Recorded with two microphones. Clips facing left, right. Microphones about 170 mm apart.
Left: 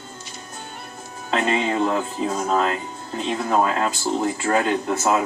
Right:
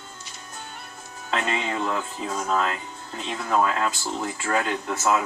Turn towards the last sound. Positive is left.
turn(degrees=35)  # may be behind; listen again after turning